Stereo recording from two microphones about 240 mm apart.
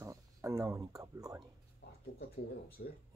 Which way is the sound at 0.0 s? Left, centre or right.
Centre.